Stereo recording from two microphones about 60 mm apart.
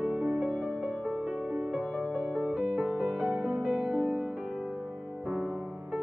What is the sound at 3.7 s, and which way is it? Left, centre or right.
Music, centre.